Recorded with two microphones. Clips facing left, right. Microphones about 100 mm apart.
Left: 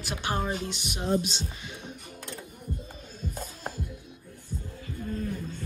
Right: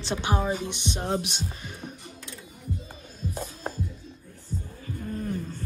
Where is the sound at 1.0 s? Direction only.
65° right (ahead or behind).